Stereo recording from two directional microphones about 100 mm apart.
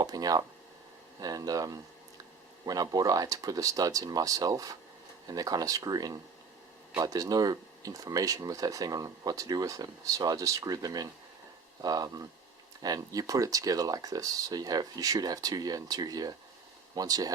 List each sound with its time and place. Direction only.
0.0 s speech: 40° right (ahead or behind)